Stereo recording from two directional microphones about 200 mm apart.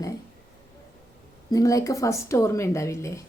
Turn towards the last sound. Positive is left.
turn(degrees=15)  # may be behind; listen again after turning